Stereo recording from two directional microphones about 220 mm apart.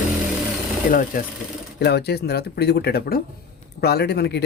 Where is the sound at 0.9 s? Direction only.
40° left (ahead or behind).